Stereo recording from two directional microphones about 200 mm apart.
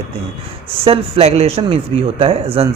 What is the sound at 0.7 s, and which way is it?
Speech, 30° right (ahead or behind).